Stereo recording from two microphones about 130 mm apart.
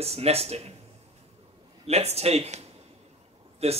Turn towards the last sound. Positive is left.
turn(degrees=-50)  # may be behind; listen again after turning